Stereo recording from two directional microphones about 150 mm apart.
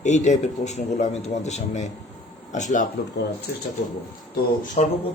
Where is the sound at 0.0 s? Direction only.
50° left (ahead or behind).